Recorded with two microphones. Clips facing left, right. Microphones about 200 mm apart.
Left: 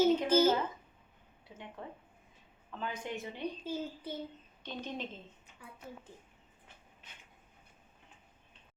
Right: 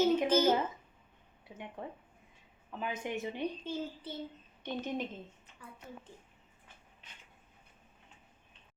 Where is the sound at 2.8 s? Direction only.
15° right (ahead or behind).